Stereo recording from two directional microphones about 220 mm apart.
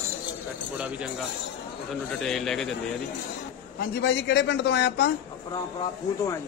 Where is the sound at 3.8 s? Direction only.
50° left (ahead or behind).